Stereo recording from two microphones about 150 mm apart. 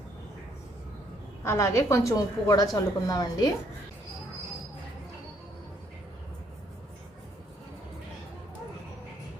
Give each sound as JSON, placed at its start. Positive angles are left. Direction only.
{"t": 1.5, "sound": "a woman's voice", "side_deg": 20}